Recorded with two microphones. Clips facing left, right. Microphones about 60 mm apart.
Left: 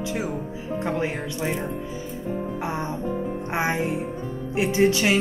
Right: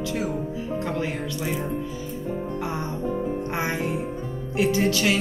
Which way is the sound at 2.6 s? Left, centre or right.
Left.